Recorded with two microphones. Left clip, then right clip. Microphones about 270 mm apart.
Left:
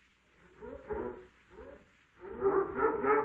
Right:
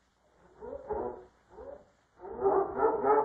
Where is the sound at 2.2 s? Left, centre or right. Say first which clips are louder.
Right 3 dB; right.